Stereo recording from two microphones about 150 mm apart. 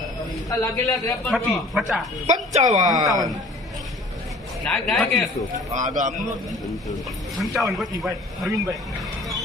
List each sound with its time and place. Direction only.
0.5 s a man's voice: 20° left (ahead or behind)
1.2 s speech: centre (ahead or behind)
2.2 s speech: 50° right (ahead or behind)
2.9 s speech: 25° right (ahead or behind)
4.6 s speech: centre (ahead or behind)
5.7 s speech: 60° right (ahead or behind)
7.3 s speech: centre (ahead or behind)